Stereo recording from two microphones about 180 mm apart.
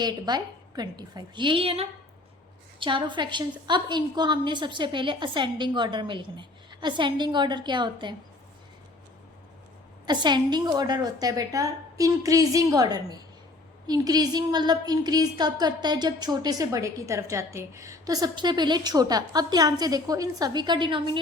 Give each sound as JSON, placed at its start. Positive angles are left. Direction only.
{"t": 0.0, "sound": "a woman's voice", "side_deg": -25}
{"t": 10.1, "sound": "a woman's voice", "side_deg": -25}